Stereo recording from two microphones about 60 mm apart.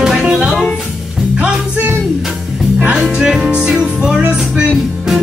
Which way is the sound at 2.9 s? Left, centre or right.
Centre.